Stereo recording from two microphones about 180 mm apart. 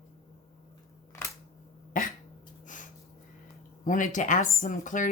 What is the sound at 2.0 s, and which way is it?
Cough, 50° left (ahead or behind).